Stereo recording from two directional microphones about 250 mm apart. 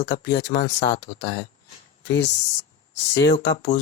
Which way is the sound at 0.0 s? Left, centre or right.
Left.